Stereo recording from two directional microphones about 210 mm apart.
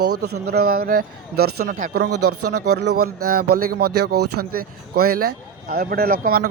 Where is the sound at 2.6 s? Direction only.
50° right (ahead or behind).